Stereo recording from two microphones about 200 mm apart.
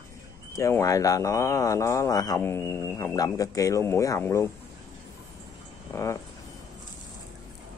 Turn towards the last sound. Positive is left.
turn(degrees=15)  # may be behind; listen again after turning